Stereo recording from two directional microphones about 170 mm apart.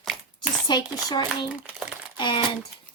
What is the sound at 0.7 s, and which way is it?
Speech, 25° left (ahead or behind).